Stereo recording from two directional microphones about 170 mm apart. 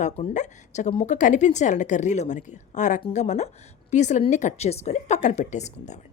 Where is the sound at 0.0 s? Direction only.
45° left (ahead or behind).